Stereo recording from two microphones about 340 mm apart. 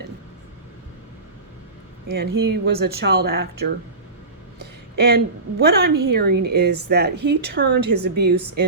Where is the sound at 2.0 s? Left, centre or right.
Right.